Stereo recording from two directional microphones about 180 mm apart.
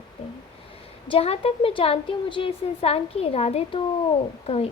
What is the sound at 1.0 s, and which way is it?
Speech, 35° left (ahead or behind).